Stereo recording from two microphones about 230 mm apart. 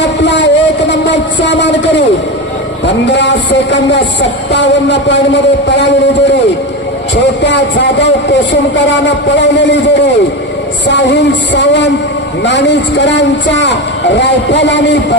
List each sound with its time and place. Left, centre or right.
0.0 s a sound: left
2.8 s speech: left
7.4 s speech: left